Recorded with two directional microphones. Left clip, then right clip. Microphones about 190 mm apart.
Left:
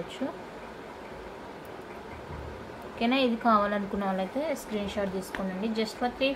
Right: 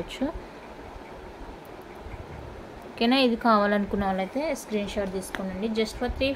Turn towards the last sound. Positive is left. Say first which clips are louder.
# right 1 dB
turn(degrees=-40)  # may be behind; listen again after turning